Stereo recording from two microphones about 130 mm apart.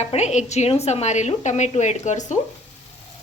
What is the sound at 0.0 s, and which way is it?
A woman's voice, 55° left (ahead or behind).